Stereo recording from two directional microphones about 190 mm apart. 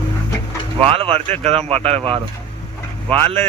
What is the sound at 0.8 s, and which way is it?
Speech, 30° right (ahead or behind).